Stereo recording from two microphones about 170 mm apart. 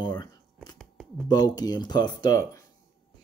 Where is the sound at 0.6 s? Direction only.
Centre (ahead or behind).